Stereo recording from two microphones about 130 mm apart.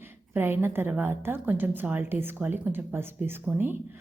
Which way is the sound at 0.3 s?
15° right (ahead or behind).